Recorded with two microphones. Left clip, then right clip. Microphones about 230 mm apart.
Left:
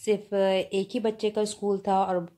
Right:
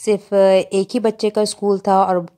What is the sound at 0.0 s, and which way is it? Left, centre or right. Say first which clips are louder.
Speech: right 11 dB; right.